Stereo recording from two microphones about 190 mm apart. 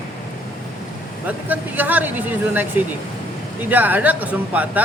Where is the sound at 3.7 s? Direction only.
10° right (ahead or behind).